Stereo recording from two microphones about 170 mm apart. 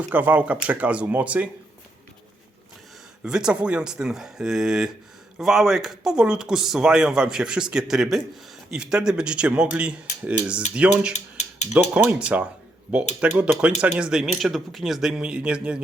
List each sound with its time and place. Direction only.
0.1 s speech: 10° right (ahead or behind)
3.2 s speech: 5° right (ahead or behind)
11.1 s mechanisms: 40° left (ahead or behind)
11.7 s speech: 10° right (ahead or behind)